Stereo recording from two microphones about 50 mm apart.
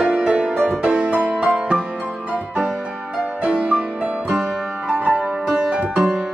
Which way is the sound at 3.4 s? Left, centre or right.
Right.